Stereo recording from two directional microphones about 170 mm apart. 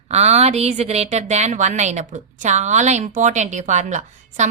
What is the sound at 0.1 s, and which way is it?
A woman's voice, 40° right (ahead or behind).